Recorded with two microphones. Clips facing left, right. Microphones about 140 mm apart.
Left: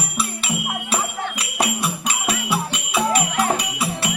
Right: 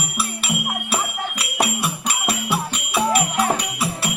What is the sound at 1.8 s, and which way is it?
Music, 5° right (ahead or behind).